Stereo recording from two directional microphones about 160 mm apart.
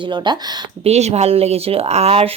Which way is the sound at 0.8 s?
45° right (ahead or behind).